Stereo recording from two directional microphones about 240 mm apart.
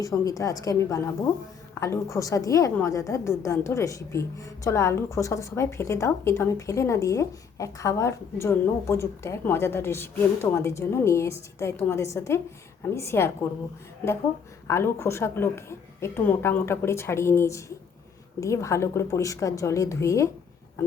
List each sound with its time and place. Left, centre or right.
0.0 s a woman's voice: centre
14.7 s a woman's voice: centre